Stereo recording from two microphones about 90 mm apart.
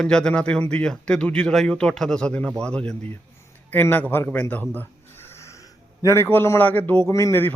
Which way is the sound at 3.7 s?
20° left (ahead or behind).